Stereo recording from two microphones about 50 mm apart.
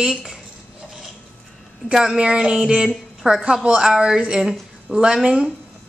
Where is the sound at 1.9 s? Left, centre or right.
Centre.